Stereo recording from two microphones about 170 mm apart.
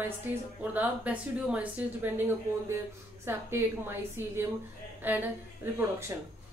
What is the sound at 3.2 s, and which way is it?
A woman's voice, 15° right (ahead or behind).